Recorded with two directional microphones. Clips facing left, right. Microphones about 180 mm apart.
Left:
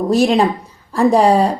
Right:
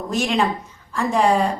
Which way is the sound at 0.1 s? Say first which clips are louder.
Left 6 dB; 35° left (ahead or behind).